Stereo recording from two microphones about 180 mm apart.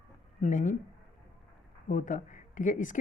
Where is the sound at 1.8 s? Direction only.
45° left (ahead or behind).